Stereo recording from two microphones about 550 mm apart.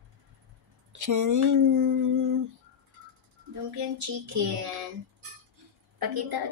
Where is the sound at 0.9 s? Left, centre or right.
Right.